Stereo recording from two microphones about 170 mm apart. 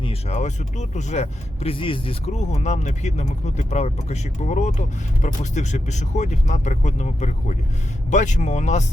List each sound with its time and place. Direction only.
0.0 s speech: 35° left (ahead or behind)